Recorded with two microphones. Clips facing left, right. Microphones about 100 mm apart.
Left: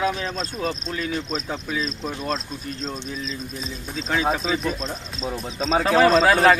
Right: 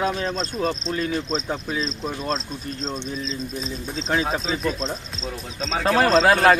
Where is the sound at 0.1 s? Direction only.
30° right (ahead or behind).